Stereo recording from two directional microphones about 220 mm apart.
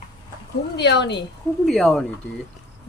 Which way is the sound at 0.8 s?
50° left (ahead or behind).